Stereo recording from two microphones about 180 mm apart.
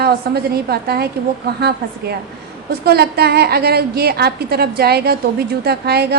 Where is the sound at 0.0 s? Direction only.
60° right (ahead or behind).